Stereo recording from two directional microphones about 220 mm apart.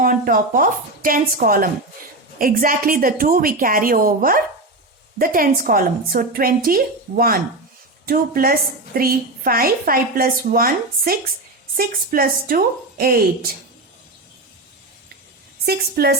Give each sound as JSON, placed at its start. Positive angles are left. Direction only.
{"t": 0.0, "sound": "a woman's voice", "side_deg": -40}
{"t": 15.6, "sound": "a woman's voice", "side_deg": -45}